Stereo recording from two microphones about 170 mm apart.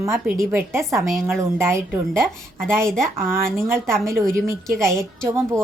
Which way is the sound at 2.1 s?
5° left (ahead or behind).